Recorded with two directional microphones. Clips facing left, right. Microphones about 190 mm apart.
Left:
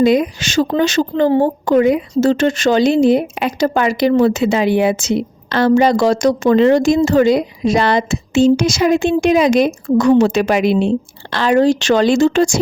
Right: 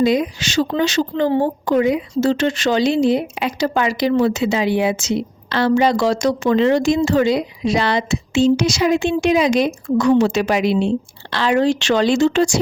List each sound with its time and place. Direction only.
0.0 s speech: 55° left (ahead or behind)